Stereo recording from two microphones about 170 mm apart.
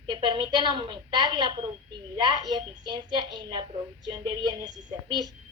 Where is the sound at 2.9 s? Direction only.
25° right (ahead or behind).